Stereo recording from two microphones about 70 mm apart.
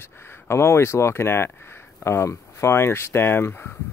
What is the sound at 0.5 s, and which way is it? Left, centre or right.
Speech, left.